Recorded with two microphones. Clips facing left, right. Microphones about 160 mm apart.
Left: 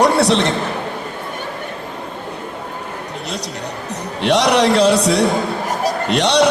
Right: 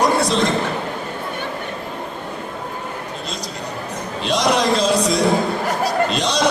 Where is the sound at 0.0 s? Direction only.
70° left (ahead or behind).